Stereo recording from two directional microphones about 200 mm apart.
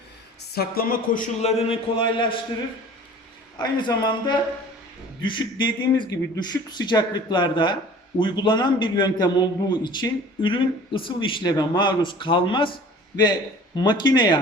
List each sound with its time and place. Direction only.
0.5 s a man's voice: 50° left (ahead or behind); by 2.4 s 25° left (ahead or behind)
3.6 s a man's voice: 20° left (ahead or behind)
13.7 s a man's voice: 20° left (ahead or behind)